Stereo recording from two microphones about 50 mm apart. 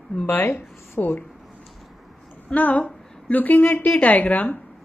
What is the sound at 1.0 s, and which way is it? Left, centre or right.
Speech, left.